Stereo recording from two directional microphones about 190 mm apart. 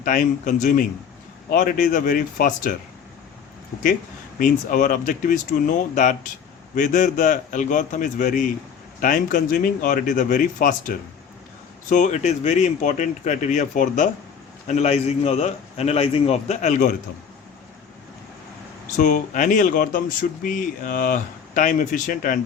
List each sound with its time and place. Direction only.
0.0 s speech: 45° left (ahead or behind)
4.4 s a man's voice: 45° left (ahead or behind)
18.9 s speech: 45° left (ahead or behind)